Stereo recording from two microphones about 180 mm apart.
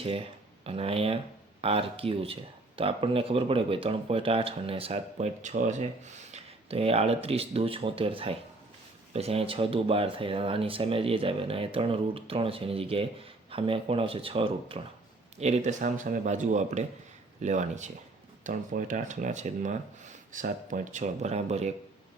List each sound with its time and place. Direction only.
0.6 s speech: 30° right (ahead or behind)